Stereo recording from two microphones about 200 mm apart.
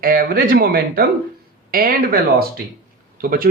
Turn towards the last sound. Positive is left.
turn(degrees=-45)  # may be behind; listen again after turning